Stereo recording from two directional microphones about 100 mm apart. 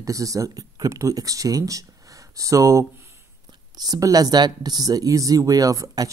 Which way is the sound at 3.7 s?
40° right (ahead or behind).